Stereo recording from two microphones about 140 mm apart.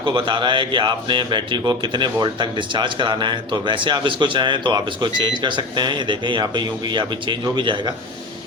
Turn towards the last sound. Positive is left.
turn(degrees=-35)  # may be behind; listen again after turning